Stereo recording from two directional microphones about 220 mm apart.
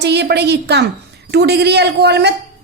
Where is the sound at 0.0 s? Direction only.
50° right (ahead or behind).